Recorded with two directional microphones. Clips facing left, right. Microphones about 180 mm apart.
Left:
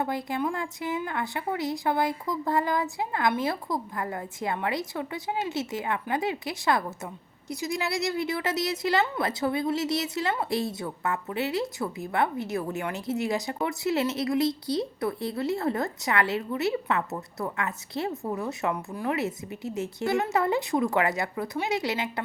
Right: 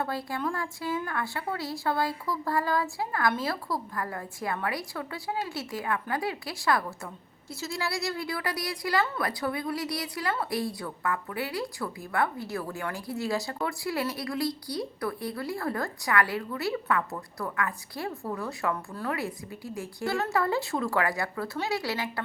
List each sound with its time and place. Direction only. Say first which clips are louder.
0.0 s a woman's voice: left 3 dB; 20° left (ahead or behind)